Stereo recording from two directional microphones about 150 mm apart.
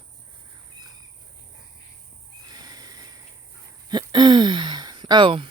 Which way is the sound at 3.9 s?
30° right (ahead or behind).